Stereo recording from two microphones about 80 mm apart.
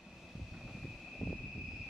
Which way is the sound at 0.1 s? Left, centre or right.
Centre.